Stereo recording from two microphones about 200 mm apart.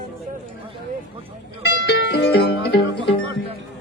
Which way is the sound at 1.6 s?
60° left (ahead or behind).